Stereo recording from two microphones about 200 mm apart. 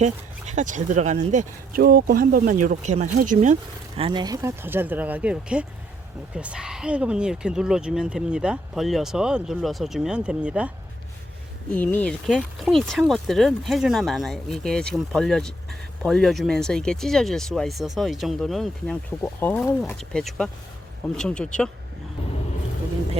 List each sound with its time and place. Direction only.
0.0 s speech: 35° right (ahead or behind); by 10.7 s 5° right (ahead or behind)
11.7 s speech: 5° left (ahead or behind)